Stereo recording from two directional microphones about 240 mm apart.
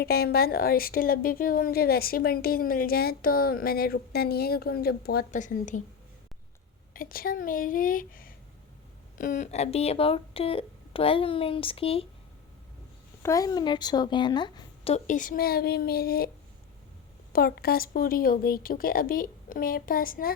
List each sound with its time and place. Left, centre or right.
0.0 s a woman's voice: left
6.9 s a woman's voice: left
13.2 s speech: centre; by 16.3 s left
17.3 s a woman's voice: left